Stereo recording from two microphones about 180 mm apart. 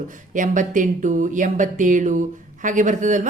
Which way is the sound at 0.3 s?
45° right (ahead or behind).